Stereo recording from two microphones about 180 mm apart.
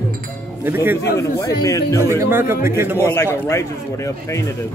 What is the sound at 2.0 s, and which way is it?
A man's voice, 15° right (ahead or behind).